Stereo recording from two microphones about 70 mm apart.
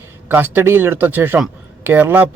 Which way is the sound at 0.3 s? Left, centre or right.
Right.